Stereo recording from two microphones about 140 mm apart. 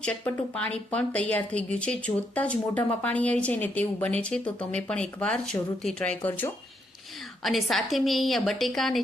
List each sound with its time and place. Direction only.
0.0 s a woman's voice: 10° left (ahead or behind)
7.4 s a woman's voice: centre (ahead or behind)